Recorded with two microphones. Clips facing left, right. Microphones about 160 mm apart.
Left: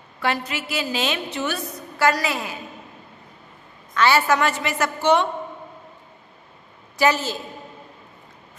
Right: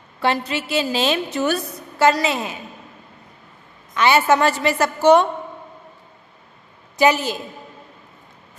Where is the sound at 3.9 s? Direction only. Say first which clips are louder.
Right 3 dB; 20° right (ahead or behind); by 5.2 s 40° right (ahead or behind).